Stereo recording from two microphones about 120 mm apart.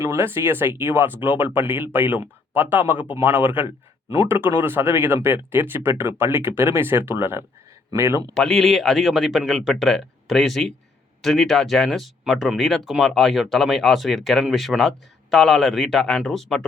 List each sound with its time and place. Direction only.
0.0 s speech: 20° right (ahead or behind)
8.3 s speech: 5° left (ahead or behind)